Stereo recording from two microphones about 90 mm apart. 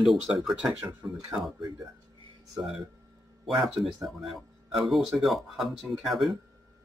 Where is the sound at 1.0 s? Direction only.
25° right (ahead or behind).